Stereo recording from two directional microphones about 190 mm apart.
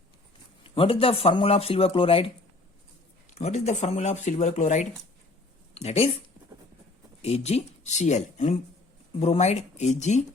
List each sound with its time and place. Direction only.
0.6 s speech: 30° left (ahead or behind)
3.3 s speech: 35° left (ahead or behind)
7.2 s speech: 35° left (ahead or behind)